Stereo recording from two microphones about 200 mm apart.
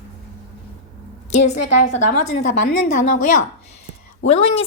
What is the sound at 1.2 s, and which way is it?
A woman's voice, 35° left (ahead or behind).